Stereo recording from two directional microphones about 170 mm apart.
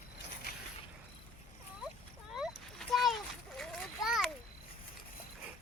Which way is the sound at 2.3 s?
Centre (ahead or behind).